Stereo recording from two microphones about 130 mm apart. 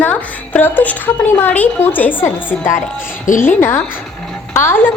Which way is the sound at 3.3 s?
80° left.